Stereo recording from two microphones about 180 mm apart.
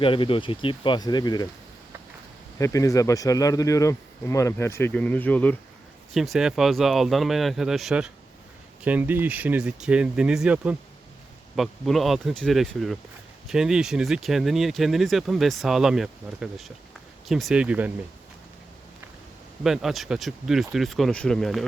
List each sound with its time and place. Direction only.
0.0 s speech: 30° left (ahead or behind)
2.6 s speech: 20° left (ahead or behind)
6.1 s speech: centre (ahead or behind)
19.6 s speech: centre (ahead or behind)